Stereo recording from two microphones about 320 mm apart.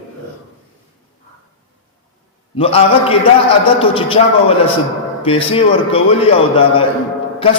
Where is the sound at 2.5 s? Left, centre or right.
Centre.